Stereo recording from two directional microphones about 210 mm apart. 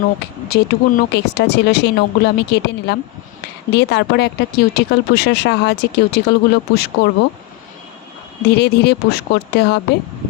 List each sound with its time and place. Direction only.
0.2 s speech: 50° left (ahead or behind)
8.5 s speech: 55° left (ahead or behind)